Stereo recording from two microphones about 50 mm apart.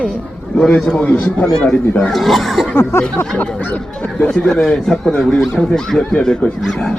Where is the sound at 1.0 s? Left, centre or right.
Left.